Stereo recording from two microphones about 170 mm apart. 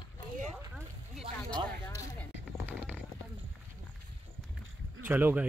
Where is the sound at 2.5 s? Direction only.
10° right (ahead or behind).